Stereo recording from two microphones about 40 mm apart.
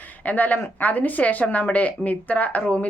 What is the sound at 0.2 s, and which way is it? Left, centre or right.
A woman's voice, left.